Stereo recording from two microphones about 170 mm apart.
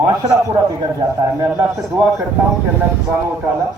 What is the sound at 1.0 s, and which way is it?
Speech, 20° right (ahead or behind).